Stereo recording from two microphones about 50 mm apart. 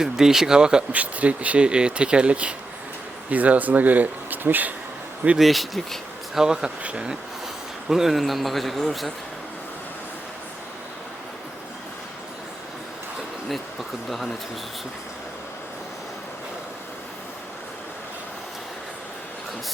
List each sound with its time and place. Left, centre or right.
0.0 s speech: centre
0.9 s speech: right
5.4 s speech: centre
6.4 s speech: centre